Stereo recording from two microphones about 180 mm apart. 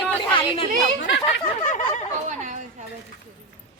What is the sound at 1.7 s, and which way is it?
Chatter, 40° left (ahead or behind).